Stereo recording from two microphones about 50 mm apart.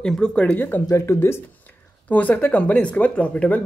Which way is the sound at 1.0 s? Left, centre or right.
Left.